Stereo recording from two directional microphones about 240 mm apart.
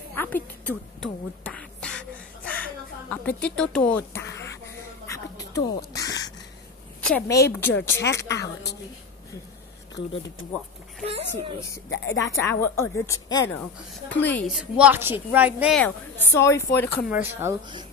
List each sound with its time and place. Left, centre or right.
0.1 s beatboxing: centre
5.0 s music: centre
5.6 s crow: centre
7.0 s speech: centre
8.0 s speech: left
11.1 s a child's voice: right
11.9 s speech: left
12.3 s speech: centre
14.6 s a woman's voice: centre
17.1 s speech: centre